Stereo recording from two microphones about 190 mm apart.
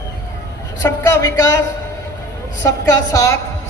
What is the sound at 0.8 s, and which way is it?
Speech, 15° left (ahead or behind).